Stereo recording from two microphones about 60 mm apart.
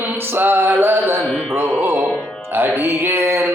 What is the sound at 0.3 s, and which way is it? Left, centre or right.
Speech, right.